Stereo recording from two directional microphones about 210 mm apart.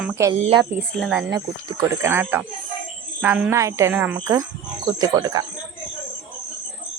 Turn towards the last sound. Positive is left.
turn(degrees=-20)  # may be behind; listen again after turning